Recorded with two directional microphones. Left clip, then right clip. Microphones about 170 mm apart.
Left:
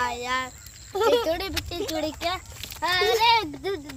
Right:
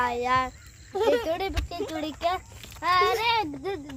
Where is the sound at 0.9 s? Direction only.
40° left (ahead or behind).